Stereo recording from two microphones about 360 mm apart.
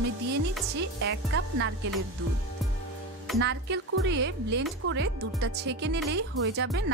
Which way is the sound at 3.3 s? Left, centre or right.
Right.